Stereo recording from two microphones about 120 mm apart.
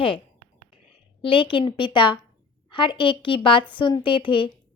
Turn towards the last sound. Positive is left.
turn(degrees=45)  # may be behind; listen again after turning